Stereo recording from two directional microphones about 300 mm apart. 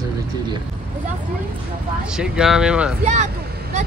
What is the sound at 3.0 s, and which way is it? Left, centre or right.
Speech, right.